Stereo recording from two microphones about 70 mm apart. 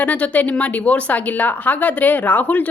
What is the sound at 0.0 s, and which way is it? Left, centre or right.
A woman's voice, left.